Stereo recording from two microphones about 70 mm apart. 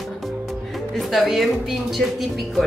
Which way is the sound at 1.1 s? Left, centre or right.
Centre.